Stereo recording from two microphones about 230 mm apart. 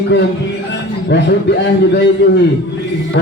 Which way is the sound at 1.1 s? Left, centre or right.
Left.